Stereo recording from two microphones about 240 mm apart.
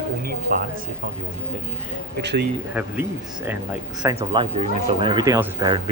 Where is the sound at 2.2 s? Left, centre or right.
Right.